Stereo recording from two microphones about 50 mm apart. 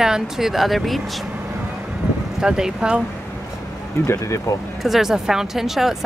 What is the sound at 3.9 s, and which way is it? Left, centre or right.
Speech, left.